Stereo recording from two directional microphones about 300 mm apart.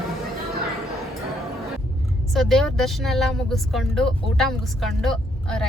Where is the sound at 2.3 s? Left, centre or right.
Centre.